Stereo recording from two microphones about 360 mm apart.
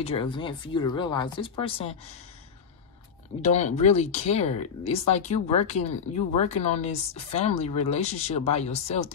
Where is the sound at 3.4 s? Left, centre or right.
Centre.